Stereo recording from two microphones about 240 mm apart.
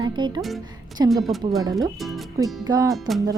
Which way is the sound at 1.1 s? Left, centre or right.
Centre.